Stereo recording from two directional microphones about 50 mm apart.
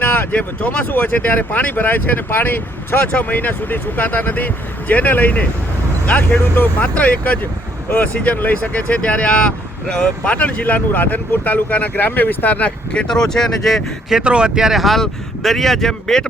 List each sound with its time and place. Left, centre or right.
0.0 s a sound: left
0.3 s speech: left
6.3 s speech: left
6.7 s speech: left
13.1 s speech: centre
14.1 s speech: centre